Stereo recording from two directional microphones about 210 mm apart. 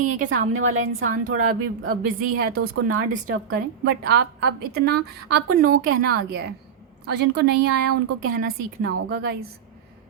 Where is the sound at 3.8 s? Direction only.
50° right (ahead or behind).